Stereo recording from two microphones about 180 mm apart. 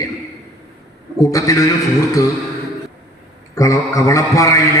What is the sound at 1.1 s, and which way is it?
Speech, 20° left (ahead or behind).